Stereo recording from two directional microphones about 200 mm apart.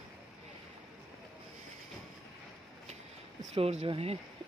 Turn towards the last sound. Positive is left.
turn(degrees=-30)  # may be behind; listen again after turning